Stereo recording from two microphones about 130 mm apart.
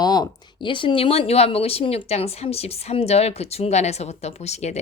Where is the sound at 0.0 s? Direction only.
30° left (ahead or behind).